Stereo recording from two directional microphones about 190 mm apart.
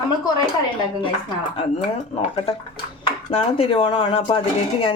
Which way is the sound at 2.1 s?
30° left (ahead or behind).